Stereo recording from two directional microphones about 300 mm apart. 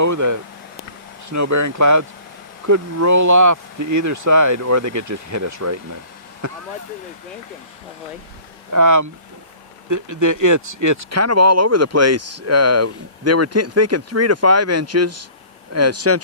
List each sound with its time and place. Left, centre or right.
0.0 s speech: right
8.7 s speech: right